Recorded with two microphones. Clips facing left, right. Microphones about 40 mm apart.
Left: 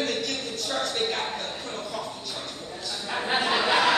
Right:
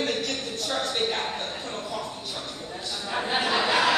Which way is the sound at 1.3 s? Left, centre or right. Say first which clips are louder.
Even; right.